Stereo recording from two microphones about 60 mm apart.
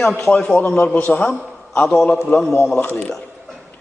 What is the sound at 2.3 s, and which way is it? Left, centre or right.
Speech, left.